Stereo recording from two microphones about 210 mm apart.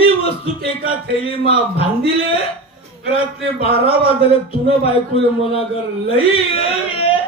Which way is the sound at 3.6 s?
30° left (ahead or behind).